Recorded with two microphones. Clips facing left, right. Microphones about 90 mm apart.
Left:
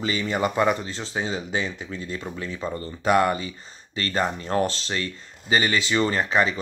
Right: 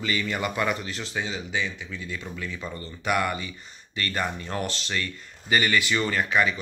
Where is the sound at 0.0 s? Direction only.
25° left (ahead or behind).